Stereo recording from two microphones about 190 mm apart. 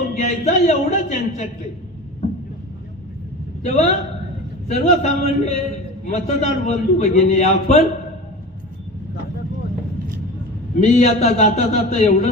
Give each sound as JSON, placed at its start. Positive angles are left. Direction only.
{"t": 0.2, "sound": "a man's voice", "side_deg": 40}
{"t": 3.6, "sound": "a man's voice", "side_deg": 35}
{"t": 10.8, "sound": "a man's voice", "side_deg": 35}